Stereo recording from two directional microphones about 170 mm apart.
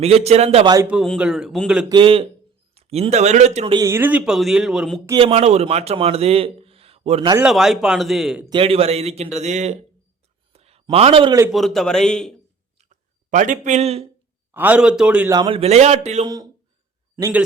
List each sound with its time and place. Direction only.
0.0 s a man's voice: 40° right (ahead or behind)
0.9 s speech: centre (ahead or behind)
1.9 s a man's voice: 30° right (ahead or behind)
3.8 s speech: 15° right (ahead or behind)
5.2 s a man's voice: 40° right (ahead or behind)
7.4 s speech: centre (ahead or behind)
8.4 s a man's voice: 30° right (ahead or behind)
10.5 s a sound: 35° right (ahead or behind)
10.9 s a man's voice: 35° right (ahead or behind)
11.5 s speech: centre (ahead or behind)
12.8 s a sound: 45° right (ahead or behind)
14.5 s a man's voice: 10° right (ahead or behind)
15.3 s a man's voice: 25° right (ahead or behind)
16.2 s a man's voice: 25° right (ahead or behind)